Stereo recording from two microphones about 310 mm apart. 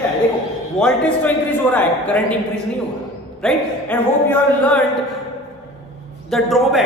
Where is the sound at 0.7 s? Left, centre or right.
Centre.